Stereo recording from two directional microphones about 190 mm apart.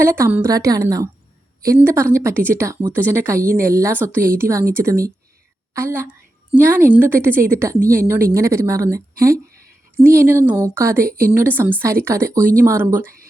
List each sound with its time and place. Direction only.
0.0 s speech: 15° right (ahead or behind)